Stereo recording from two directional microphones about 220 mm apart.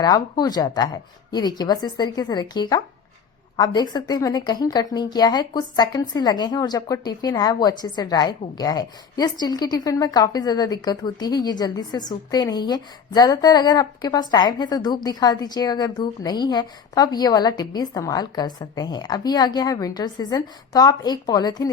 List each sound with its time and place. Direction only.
0.0 s a woman's voice: 15° left (ahead or behind)